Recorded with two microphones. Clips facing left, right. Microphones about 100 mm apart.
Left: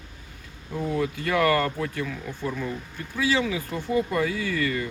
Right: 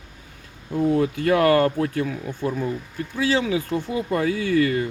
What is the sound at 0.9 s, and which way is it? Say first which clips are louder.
Speech: right 4 dB; 40° right (ahead or behind).